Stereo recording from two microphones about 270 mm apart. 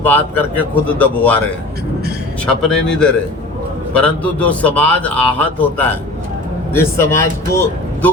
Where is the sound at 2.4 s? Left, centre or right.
Centre.